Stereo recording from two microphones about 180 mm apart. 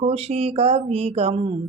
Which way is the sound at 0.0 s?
35° right (ahead or behind).